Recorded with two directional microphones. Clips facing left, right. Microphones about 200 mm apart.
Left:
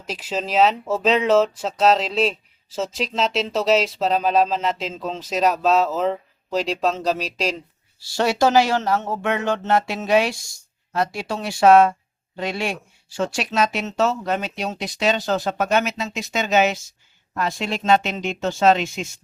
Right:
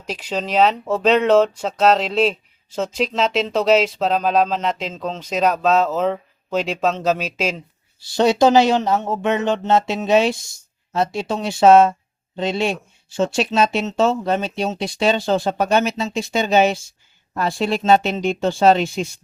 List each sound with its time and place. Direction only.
0.1 s speech: 5° left (ahead or behind)
8.0 s speech: 20° right (ahead or behind)